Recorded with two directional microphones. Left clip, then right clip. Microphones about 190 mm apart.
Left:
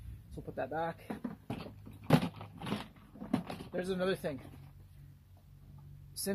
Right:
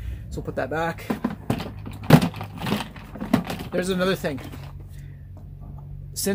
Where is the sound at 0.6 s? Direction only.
10° left (ahead or behind).